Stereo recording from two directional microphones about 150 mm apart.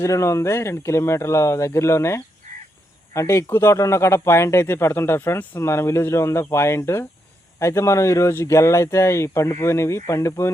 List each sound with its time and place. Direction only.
0.0 s speech: 20° left (ahead or behind)
2.4 s a sound: 55° right (ahead or behind)
3.1 s speech: 20° left (ahead or behind)